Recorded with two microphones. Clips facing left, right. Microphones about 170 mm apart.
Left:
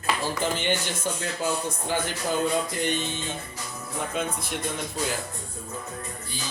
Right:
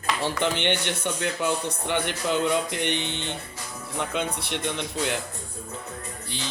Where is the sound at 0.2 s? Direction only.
70° right (ahead or behind).